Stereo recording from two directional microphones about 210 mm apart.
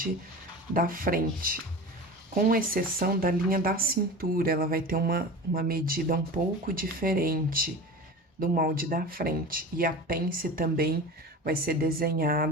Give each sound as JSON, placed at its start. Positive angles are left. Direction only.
{"t": 0.7, "sound": "speech", "side_deg": -40}